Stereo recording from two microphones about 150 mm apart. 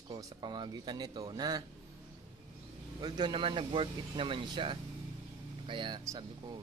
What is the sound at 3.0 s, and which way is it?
Speech, 30° right (ahead or behind).